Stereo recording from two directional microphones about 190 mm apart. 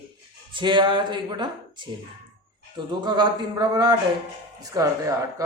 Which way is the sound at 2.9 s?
25° right (ahead or behind).